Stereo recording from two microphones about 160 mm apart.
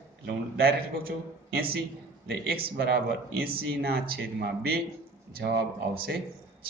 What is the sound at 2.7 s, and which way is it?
Speech, 90° right.